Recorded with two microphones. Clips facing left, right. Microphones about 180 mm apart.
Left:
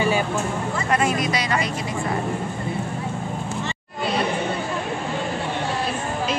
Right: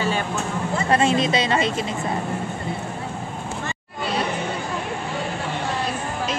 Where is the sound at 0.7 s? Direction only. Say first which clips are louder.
Right 4 dB; 30° right (ahead or behind).